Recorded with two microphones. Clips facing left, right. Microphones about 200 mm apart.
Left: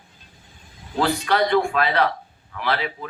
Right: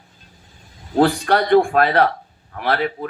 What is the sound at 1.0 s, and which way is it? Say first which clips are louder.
Speech: right 5 dB; 50° right (ahead or behind).